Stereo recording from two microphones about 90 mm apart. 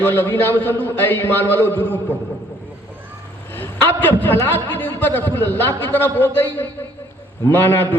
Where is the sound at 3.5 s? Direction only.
25° left (ahead or behind).